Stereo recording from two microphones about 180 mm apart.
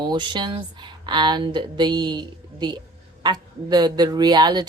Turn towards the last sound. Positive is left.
turn(degrees=-25)  # may be behind; listen again after turning